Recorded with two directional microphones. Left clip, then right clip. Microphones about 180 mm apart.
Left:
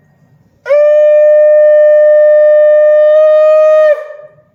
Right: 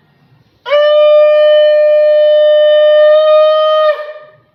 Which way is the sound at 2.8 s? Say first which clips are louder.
Left 1 dB; 20° left (ahead or behind).